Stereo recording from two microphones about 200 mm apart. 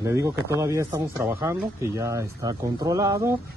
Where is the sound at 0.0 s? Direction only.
15° right (ahead or behind).